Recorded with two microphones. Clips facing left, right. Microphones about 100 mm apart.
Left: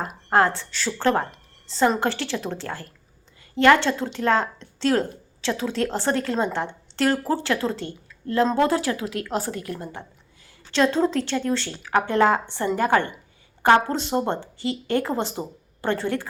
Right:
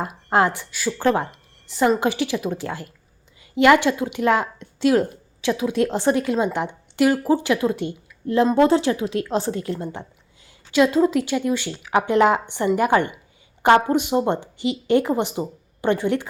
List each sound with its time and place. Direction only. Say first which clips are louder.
0.0 s speech: right 1 dB; 15° right (ahead or behind)
10.7 s speech: right 3 dB; 10° right (ahead or behind)